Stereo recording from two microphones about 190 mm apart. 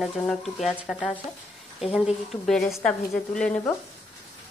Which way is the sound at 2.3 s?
Centre (ahead or behind).